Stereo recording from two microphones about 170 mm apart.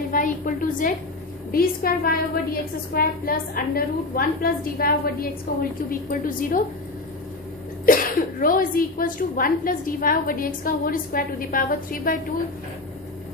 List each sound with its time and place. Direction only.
0.1 s a sound: 55° left (ahead or behind)
1.5 s a woman's voice: 60° left (ahead or behind)
7.9 s cough: 55° left (ahead or behind)
8.4 s a woman's voice: 55° left (ahead or behind)